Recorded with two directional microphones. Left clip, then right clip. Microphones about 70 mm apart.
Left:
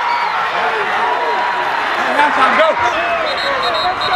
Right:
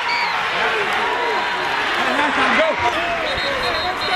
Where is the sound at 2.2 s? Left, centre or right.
Left.